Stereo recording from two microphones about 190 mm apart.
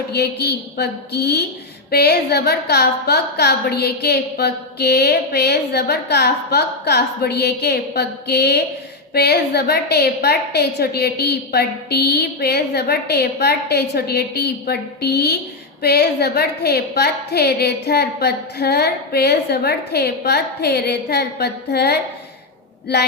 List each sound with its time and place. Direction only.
0.1 s a woman's voice: 60° left (ahead or behind)